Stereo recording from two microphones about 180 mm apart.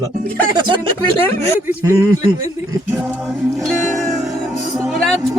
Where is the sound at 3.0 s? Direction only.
5° right (ahead or behind).